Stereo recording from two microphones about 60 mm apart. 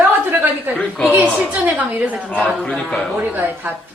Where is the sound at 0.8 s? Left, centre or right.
Centre.